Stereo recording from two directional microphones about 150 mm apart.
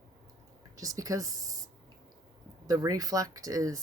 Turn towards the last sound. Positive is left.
turn(degrees=-20)  # may be behind; listen again after turning